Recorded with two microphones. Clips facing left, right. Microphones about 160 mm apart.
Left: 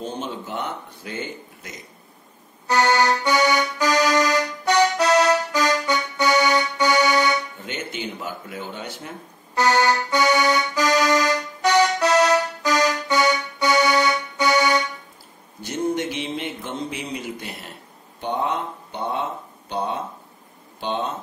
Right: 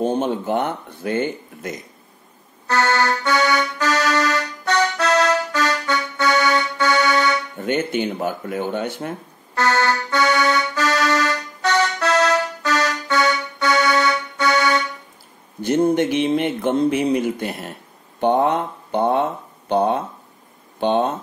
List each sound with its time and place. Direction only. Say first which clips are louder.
0.0 s speech: right 10 dB; 55° right (ahead or behind)
2.6 s accordion: even; 15° left (ahead or behind)
7.6 s speech: right 10 dB; 50° right (ahead or behind)
9.6 s accordion: even; 15° left (ahead or behind)
15.6 s speech: right 7 dB; 55° right (ahead or behind)
19.7 s a sound: right 8 dB; 55° right (ahead or behind)